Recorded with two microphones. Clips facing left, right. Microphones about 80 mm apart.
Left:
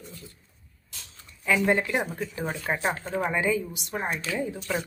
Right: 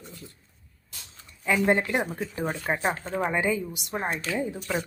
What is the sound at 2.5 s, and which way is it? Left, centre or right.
Speech, centre.